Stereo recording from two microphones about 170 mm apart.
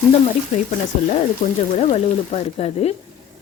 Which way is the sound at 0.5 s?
40° left (ahead or behind).